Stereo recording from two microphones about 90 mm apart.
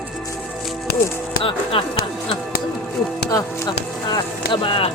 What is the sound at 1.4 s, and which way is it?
Music, 75° left (ahead or behind).